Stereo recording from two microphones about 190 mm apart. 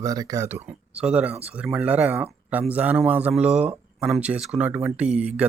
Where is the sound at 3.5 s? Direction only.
35° right (ahead or behind).